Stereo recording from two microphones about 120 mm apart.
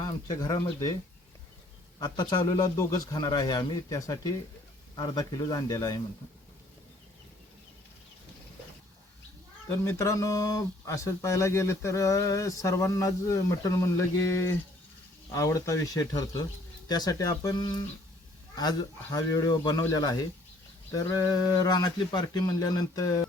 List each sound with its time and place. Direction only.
0.0 s speech: 30° left (ahead or behind)
2.0 s speech: 35° left (ahead or behind)
4.9 s speech: 40° left (ahead or behind)
5.4 s speech: 30° left (ahead or behind)
9.6 s speech: 25° left (ahead or behind)